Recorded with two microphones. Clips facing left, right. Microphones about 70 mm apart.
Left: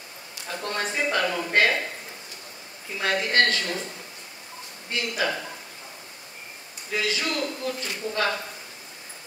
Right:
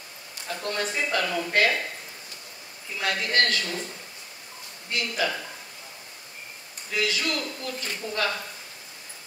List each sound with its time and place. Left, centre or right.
0.6 s speech: left
3.0 s speech: left
4.9 s a man's voice: left
6.9 s speech: left